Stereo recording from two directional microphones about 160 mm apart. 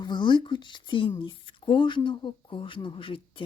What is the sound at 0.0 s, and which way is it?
Speech, 30° left (ahead or behind).